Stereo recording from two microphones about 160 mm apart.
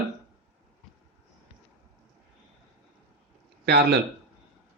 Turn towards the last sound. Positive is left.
turn(degrees=-90)